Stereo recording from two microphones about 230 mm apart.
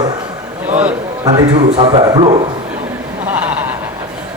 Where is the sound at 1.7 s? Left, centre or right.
Right.